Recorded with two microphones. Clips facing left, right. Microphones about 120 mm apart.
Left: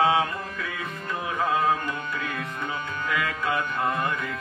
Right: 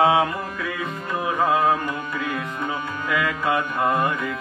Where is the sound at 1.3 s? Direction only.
35° right (ahead or behind).